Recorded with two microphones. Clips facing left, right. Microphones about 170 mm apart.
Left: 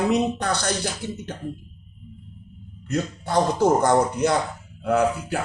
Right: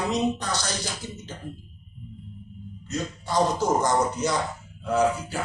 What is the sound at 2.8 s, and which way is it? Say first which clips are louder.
Speech: left 5 dB; 60° left (ahead or behind).